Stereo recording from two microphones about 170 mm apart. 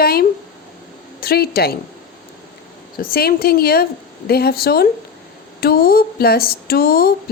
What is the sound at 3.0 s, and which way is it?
Speech, 60° left (ahead or behind).